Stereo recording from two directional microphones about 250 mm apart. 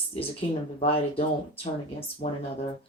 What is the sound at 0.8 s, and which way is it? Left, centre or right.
Speech, left.